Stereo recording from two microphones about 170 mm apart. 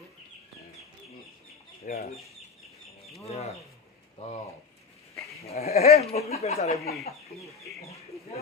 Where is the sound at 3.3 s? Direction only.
40° left (ahead or behind).